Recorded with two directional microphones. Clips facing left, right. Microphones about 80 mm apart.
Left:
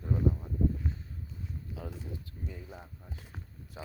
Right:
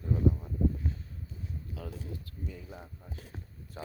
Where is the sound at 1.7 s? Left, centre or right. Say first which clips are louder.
Even; left.